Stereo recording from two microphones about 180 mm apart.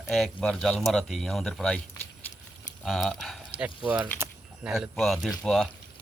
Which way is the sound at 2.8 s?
Centre (ahead or behind).